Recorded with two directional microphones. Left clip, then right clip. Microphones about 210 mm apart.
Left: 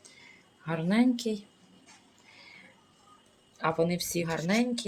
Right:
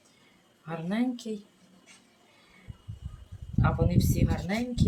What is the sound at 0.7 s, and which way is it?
Speech, 50° left (ahead or behind).